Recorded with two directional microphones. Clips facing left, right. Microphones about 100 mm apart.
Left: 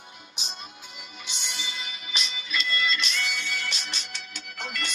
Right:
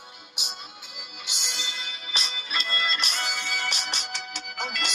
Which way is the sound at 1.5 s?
30° right (ahead or behind).